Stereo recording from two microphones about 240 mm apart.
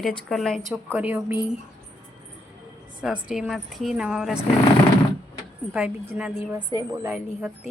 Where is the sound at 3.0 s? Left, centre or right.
Centre.